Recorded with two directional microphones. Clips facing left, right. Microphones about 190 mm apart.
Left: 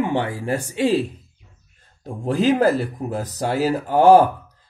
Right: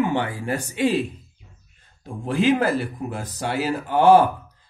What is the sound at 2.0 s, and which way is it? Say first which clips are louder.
Speech: left 1 dB; 40° left (ahead or behind).